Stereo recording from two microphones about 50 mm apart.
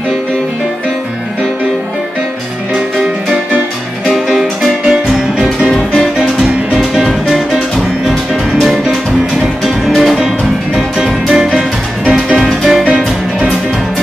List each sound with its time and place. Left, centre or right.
4.1 s music: centre
5.7 s music: centre
9.4 s music: centre
12.0 s music: right
12.4 s music: centre
12.8 s music: right